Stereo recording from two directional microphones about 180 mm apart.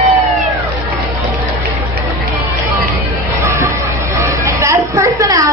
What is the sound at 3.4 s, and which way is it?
Music, 15° right (ahead or behind).